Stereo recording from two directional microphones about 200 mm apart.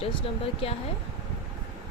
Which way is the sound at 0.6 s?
30° left (ahead or behind).